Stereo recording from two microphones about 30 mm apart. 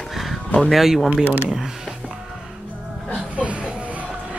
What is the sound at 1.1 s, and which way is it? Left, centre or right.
Speech, right.